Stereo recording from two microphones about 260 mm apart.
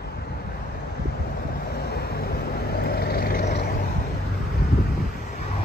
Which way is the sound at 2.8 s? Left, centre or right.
Left.